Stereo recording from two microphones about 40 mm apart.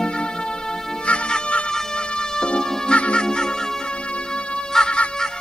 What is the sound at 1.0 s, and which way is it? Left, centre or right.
Music, left.